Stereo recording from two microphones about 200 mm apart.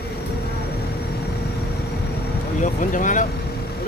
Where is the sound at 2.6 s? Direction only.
40° left (ahead or behind).